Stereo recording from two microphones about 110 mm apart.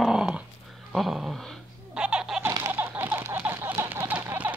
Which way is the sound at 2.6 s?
20° right (ahead or behind).